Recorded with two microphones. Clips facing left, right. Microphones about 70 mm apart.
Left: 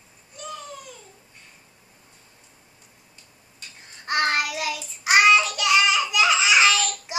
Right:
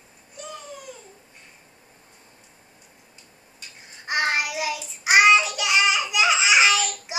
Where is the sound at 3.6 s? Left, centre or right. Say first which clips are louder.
Even; centre.